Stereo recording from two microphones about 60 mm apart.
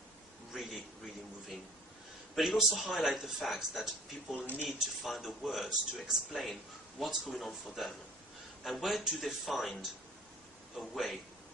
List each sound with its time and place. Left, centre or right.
0.5 s a sound: centre
2.3 s speech: centre
4.4 s speech: left
4.6 s speech: centre